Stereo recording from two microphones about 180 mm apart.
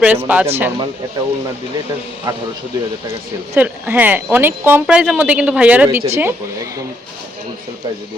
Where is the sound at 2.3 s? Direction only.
20° right (ahead or behind).